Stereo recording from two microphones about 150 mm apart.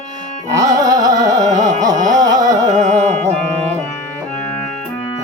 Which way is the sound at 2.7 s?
50° right (ahead or behind).